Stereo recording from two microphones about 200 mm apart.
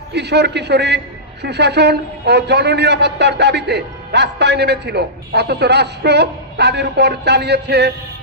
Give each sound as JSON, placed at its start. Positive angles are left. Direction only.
{"t": 0.1, "sound": "a man's voice", "side_deg": -55}